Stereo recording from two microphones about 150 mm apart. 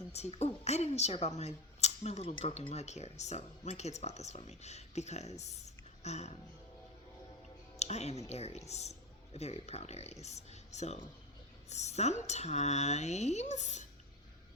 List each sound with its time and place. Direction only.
0.1 s a woman's voice: 45° left (ahead or behind)
7.8 s speech: 50° left (ahead or behind)